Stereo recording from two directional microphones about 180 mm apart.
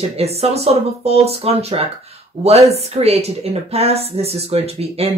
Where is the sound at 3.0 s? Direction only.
35° right (ahead or behind).